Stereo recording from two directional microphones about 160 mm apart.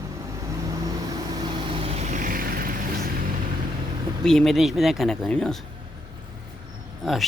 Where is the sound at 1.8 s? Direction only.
50° right (ahead or behind).